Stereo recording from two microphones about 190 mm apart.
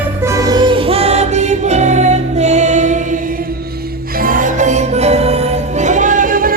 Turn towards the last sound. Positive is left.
turn(degrees=-45)  # may be behind; listen again after turning